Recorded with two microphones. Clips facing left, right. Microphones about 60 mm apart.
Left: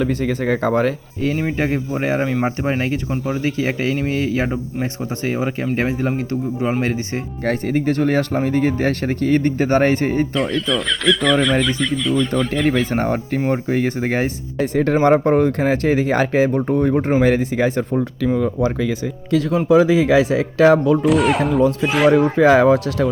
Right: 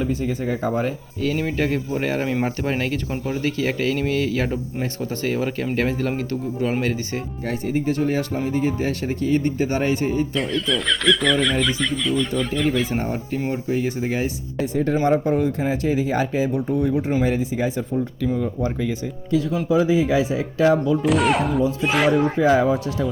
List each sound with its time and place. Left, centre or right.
0.0 s speech: left
1.2 s speech: left
7.4 s speech: left
10.3 s speech: centre
12.9 s speech: left
17.2 s speech: left
21.0 s speech: centre
22.1 s speech: left